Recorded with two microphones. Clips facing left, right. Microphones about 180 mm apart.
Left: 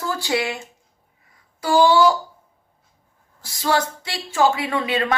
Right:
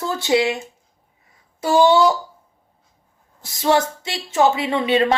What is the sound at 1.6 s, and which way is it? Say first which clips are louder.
Speech: right 1 dB; 25° right (ahead or behind).